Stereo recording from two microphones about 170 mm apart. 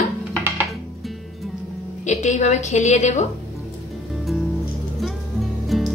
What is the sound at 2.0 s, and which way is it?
A woman's voice, 45° left (ahead or behind).